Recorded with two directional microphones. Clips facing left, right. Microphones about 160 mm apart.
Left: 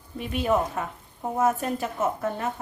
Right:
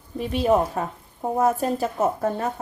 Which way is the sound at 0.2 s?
35° right (ahead or behind).